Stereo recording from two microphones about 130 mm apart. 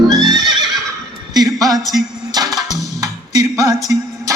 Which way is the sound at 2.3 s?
30° right (ahead or behind).